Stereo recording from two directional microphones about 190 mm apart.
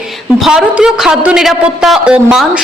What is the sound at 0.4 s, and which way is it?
A woman's voice, 5° right (ahead or behind).